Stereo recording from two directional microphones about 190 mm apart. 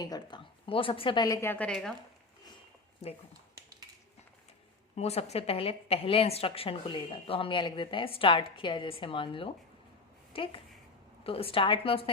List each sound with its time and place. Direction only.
0.0 s a woman's voice: 20° left (ahead or behind); by 1.9 s 5° left (ahead or behind)
3.0 s speech: 30° left (ahead or behind)
4.9 s a woman's voice: 35° left (ahead or behind)